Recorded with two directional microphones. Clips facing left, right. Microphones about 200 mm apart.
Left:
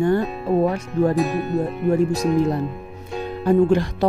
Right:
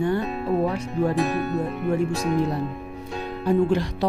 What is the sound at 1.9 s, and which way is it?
Speech, 40° left (ahead or behind).